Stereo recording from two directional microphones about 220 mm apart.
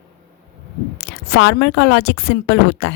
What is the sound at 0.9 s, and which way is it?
A woman's voice, 50° left (ahead or behind).